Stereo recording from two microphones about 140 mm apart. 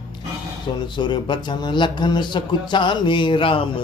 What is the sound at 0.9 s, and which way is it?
Speech, 35° left (ahead or behind).